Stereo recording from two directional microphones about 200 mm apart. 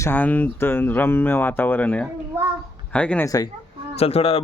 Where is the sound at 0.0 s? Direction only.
10° left (ahead or behind).